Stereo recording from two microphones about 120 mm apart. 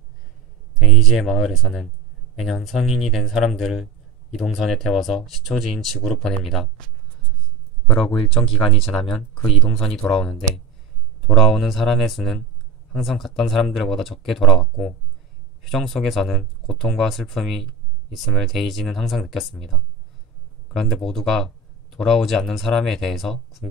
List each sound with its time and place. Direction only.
0.7 s speech: centre (ahead or behind)
8.0 s speech: 40° left (ahead or behind)
9.6 s speech: 5° left (ahead or behind)